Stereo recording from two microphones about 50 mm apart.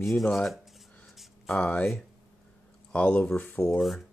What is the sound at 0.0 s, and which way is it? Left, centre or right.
Speech, centre.